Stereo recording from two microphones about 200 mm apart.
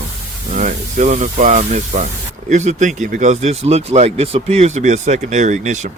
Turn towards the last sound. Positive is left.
turn(degrees=-35)  # may be behind; listen again after turning